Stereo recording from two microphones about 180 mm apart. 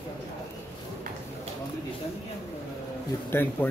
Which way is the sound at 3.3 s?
10° left (ahead or behind).